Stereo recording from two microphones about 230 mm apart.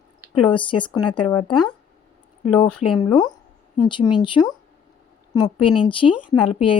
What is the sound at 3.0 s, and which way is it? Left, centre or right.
Speech, centre.